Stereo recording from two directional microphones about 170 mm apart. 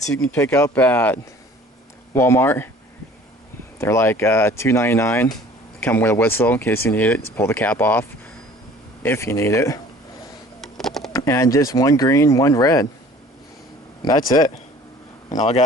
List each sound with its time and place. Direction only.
0.1 s speech: 10° left (ahead or behind)
3.8 s speech: 15° left (ahead or behind)
9.0 s speech: 15° left (ahead or behind)
10.6 s typing: centre (ahead or behind)
11.1 s speech: 20° left (ahead or behind)
14.0 s speech: 25° left (ahead or behind)
15.3 s a man's voice: 40° left (ahead or behind)